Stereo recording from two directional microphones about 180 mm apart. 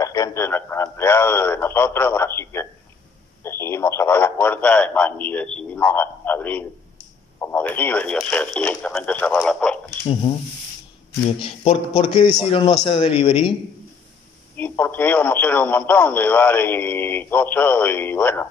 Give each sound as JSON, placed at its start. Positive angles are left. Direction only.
{"t": 0.0, "sound": "speech", "side_deg": 20}
{"t": 10.3, "sound": "speech", "side_deg": 25}
{"t": 11.4, "sound": "a man's voice", "side_deg": 30}
{"t": 14.6, "sound": "speech", "side_deg": 10}